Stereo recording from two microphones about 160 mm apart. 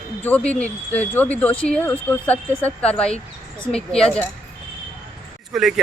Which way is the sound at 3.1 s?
30° left (ahead or behind).